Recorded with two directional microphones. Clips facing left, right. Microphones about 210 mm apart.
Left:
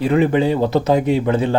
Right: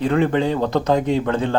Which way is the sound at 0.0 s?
10° left (ahead or behind).